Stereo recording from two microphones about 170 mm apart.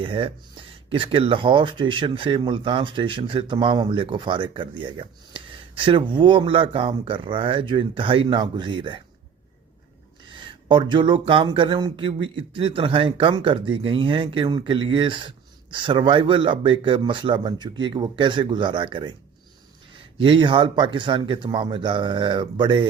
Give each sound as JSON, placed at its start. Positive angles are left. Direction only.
{"t": 0.0, "sound": "speech", "side_deg": -30}
{"t": 10.7, "sound": "speech", "side_deg": -30}